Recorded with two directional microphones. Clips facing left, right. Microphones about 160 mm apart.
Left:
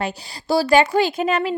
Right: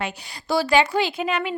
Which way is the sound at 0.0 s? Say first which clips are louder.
Left 4 dB; 35° left (ahead or behind).